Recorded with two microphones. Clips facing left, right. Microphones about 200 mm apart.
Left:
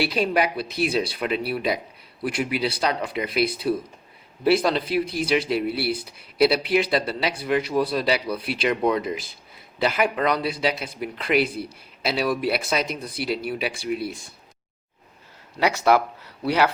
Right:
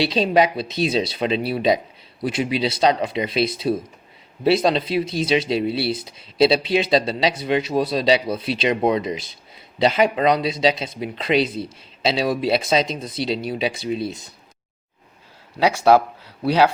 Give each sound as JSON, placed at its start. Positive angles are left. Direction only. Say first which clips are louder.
{"t": 0.0, "sound": "speech", "louder": "right 4 dB", "side_deg": -25}
{"t": 15.5, "sound": "speech", "louder": "right 3 dB", "side_deg": -15}